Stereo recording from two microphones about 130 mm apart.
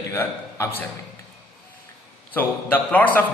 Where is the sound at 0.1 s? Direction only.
15° left (ahead or behind).